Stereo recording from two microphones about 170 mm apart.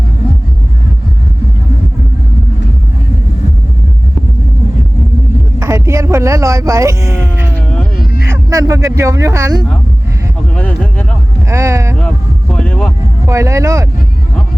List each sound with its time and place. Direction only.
5.5 s speech: 15° right (ahead or behind)
7.5 s a sound: 5° left (ahead or behind)
7.9 s a sound: 65° left (ahead or behind)
8.3 s speech: 20° right (ahead or behind)
10.5 s speech: 5° left (ahead or behind)
11.4 s speech: 20° right (ahead or behind)
11.9 s vehicle: 5° left (ahead or behind)
13.2 s speech: 20° right (ahead or behind)